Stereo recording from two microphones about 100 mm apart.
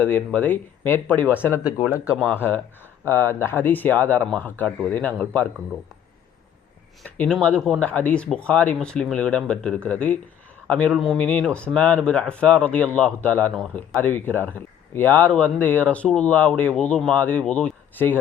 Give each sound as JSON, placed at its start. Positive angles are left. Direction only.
{"t": 0.0, "sound": "speech", "side_deg": 15}
{"t": 7.0, "sound": "speech", "side_deg": 5}
{"t": 10.9, "sound": "speech", "side_deg": 0}
{"t": 11.2, "sound": "speech", "side_deg": 15}